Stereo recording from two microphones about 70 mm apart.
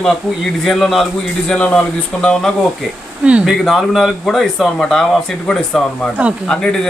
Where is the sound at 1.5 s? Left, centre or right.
Centre.